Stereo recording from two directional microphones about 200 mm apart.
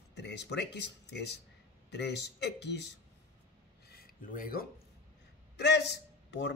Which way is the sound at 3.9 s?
45° left (ahead or behind).